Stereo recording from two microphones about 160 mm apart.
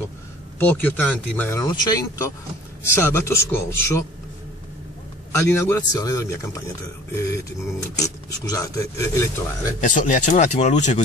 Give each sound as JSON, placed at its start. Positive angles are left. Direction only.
{"t": 0.6, "sound": "speech", "side_deg": 10}
{"t": 5.3, "sound": "speech", "side_deg": 20}
{"t": 9.8, "sound": "speech", "side_deg": 50}